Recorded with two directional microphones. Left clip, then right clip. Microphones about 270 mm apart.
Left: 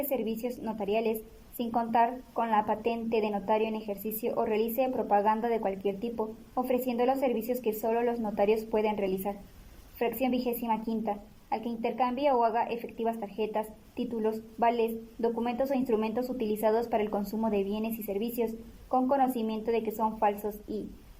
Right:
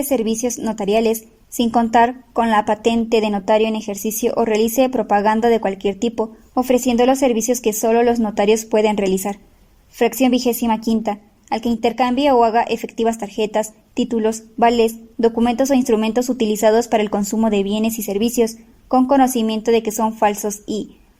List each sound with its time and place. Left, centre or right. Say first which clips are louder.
0.1 s a woman's voice: right 13 dB; right